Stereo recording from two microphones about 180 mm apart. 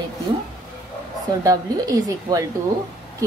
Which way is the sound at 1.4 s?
20° right (ahead or behind).